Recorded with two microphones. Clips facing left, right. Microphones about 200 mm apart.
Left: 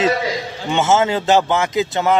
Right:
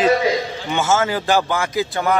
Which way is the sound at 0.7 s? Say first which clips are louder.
Left 4 dB; 25° left (ahead or behind).